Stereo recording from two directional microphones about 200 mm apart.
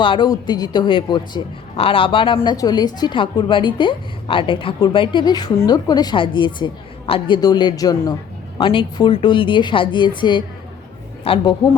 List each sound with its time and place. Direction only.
0.0 s a man's voice: 25° left (ahead or behind)